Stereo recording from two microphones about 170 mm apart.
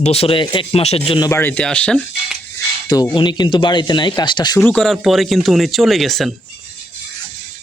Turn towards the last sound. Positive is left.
turn(degrees=0)  # may be behind; listen again after turning